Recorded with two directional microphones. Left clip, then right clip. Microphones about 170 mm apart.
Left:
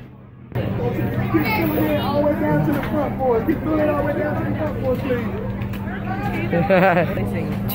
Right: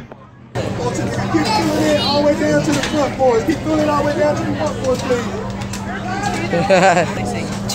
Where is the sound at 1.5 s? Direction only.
45° right (ahead or behind).